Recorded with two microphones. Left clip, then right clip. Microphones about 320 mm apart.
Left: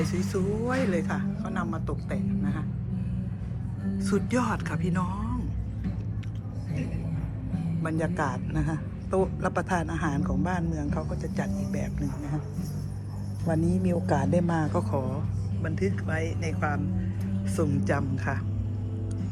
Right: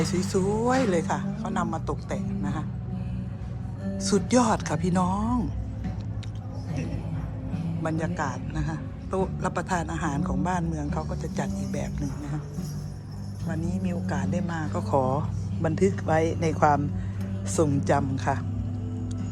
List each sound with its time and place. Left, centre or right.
0.0 s speech: centre
3.9 s speech: centre
7.8 s a man's voice: centre
13.5 s a man's voice: centre
14.9 s speech: centre
15.7 s speech: right
17.4 s speech: centre